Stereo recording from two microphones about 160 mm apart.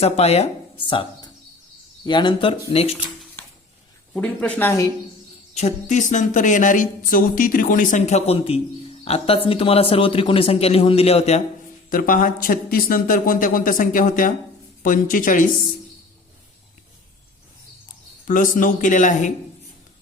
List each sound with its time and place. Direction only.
0.0 s a man's voice: 40° left (ahead or behind)
4.1 s speech: 5° left (ahead or behind)
5.5 s a man's voice: 45° left (ahead or behind)
11.9 s speech: 60° left (ahead or behind)
17.8 s speech: 55° left (ahead or behind)